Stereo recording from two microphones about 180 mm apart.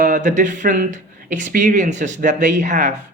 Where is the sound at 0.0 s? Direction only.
45° right (ahead or behind).